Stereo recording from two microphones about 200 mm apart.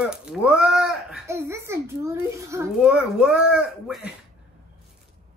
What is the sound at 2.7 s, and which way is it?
Speech, 5° right (ahead or behind).